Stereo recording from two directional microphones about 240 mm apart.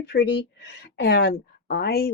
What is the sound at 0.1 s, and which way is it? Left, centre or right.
Speech, left.